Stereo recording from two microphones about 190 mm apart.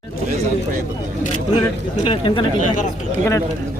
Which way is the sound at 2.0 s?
25° left (ahead or behind).